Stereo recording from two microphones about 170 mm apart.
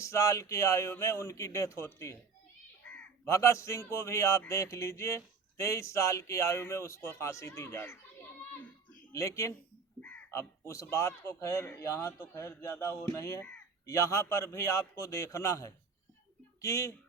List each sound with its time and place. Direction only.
0.0 s speech: 15° left (ahead or behind)
2.8 s crow: 15° left (ahead or behind)
3.9 s speech: 20° left (ahead or behind)
9.1 s speech: 20° left (ahead or behind)